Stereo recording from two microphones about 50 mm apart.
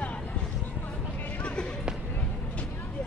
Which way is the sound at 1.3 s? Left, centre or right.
Left.